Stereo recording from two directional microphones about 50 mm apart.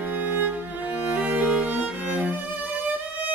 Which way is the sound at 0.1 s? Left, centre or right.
Right.